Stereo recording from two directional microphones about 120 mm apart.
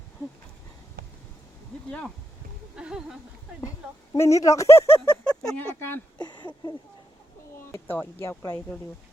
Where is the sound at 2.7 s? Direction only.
5° right (ahead or behind).